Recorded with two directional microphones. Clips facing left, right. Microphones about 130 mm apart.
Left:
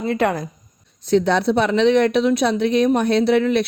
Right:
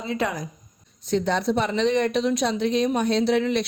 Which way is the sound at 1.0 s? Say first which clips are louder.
Left 6 dB; 70° left (ahead or behind).